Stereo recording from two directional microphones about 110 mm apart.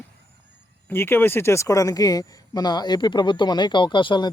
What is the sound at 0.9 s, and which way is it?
Speech, 20° left (ahead or behind).